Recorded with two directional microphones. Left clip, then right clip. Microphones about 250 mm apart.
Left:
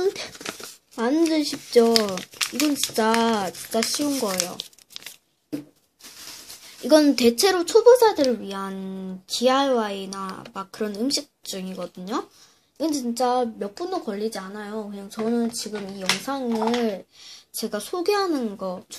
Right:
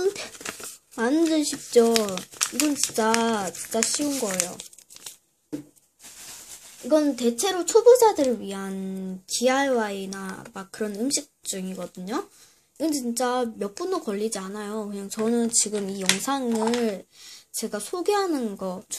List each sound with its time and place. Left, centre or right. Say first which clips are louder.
0.0 s speech: left 1 dB; centre
6.9 s a child's voice: left 5 dB; left
7.3 s speech: left 6 dB; centre
7.6 s speech: even; centre
16.8 s speech: left 1 dB; centre